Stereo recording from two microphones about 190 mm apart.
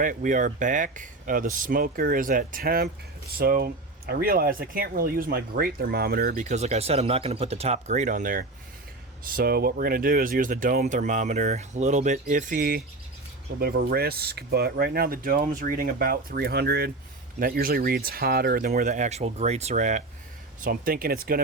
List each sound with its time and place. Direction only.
0.0 s speech: 45° right (ahead or behind)